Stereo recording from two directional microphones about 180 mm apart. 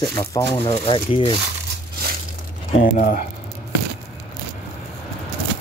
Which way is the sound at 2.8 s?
50° left (ahead or behind).